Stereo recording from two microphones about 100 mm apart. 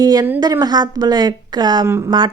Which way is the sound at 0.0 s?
40° right (ahead or behind).